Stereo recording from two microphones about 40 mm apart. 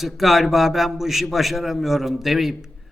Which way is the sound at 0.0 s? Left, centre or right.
Centre.